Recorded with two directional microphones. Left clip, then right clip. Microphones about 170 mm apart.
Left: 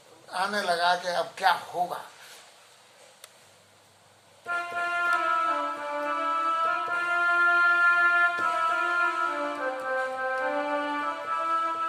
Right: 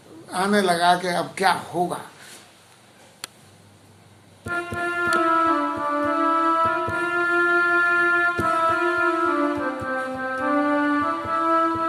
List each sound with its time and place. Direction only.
0.3 s speech: 15° right (ahead or behind)
4.4 s music: 25° right (ahead or behind)